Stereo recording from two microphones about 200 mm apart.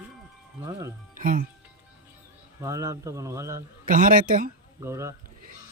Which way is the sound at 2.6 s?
15° right (ahead or behind).